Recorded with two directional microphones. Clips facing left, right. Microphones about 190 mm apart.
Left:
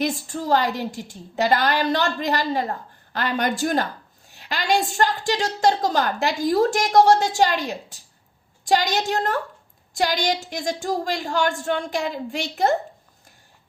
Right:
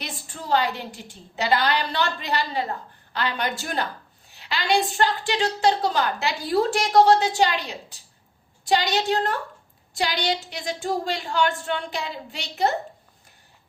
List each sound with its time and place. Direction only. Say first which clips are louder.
0.0 s a woman's voice: left 11 dB; 45° left (ahead or behind)